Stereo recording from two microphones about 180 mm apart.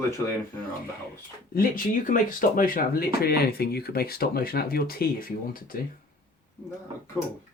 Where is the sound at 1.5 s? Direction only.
50° left (ahead or behind).